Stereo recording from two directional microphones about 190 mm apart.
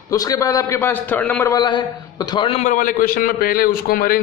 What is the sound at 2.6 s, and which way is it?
A man's voice, 45° left (ahead or behind).